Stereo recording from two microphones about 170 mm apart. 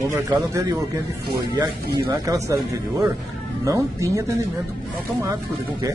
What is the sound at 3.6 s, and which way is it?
Speech, 20° right (ahead or behind).